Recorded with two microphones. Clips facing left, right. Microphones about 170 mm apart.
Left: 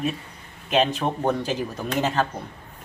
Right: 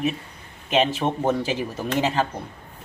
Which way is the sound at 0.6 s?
Centre (ahead or behind).